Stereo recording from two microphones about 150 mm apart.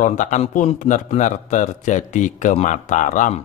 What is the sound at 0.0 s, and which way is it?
A man's voice, 60° left (ahead or behind).